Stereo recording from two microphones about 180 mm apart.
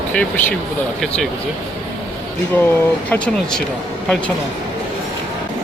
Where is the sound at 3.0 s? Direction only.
5° left (ahead or behind).